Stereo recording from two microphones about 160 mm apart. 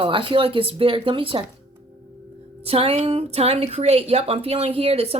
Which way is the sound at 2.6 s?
35° right (ahead or behind).